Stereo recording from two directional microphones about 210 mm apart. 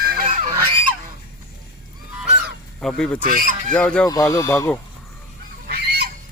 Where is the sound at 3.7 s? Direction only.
5° left (ahead or behind).